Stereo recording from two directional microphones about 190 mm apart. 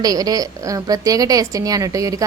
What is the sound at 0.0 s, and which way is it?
A woman's voice, 20° right (ahead or behind).